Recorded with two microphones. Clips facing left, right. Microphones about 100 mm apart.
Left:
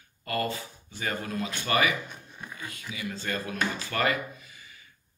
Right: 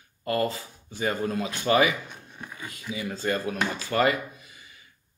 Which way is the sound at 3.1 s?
30° right (ahead or behind).